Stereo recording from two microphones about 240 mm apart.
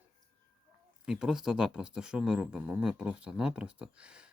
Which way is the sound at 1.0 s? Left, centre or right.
Centre.